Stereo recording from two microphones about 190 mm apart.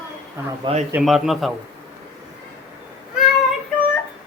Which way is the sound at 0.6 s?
30° right (ahead or behind).